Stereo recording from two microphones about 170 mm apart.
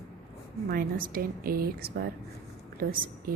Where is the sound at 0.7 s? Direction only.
55° right (ahead or behind).